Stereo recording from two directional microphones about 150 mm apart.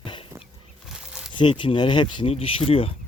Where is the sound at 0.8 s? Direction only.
5° right (ahead or behind).